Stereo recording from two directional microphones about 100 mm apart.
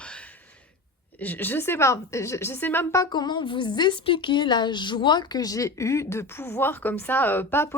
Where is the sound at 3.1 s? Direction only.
50° left (ahead or behind); by 7.8 s 25° left (ahead or behind).